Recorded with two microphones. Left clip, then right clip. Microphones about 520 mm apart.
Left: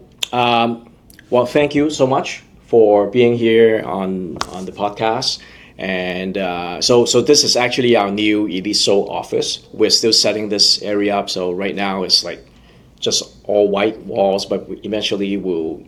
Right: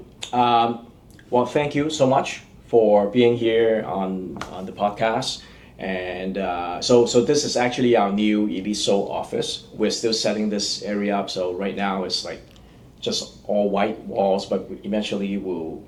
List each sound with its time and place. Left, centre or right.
0.2 s speech: left